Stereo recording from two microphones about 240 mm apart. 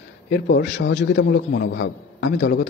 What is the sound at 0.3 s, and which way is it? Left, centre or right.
A man's voice, left.